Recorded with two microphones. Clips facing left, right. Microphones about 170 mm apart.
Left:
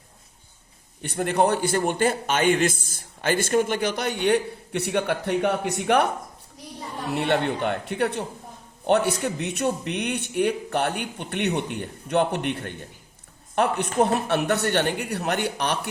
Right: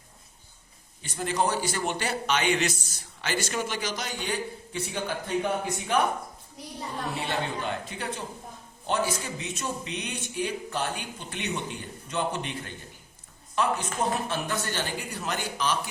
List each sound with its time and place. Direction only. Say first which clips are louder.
1.0 s a man's voice: left 6 dB; 60° left (ahead or behind)
7.2 s a man's voice: left 10 dB; 65° left (ahead or behind)